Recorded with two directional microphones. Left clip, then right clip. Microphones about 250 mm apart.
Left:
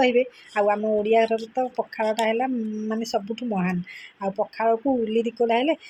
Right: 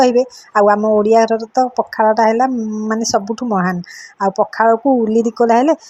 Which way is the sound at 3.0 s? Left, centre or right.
Right.